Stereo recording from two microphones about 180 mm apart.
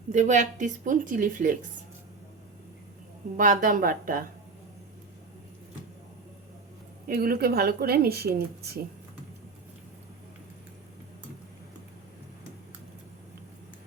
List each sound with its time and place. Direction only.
0.1 s speech: 45° right (ahead or behind)
3.3 s speech: 45° right (ahead or behind)
7.1 s a woman's voice: 55° right (ahead or behind)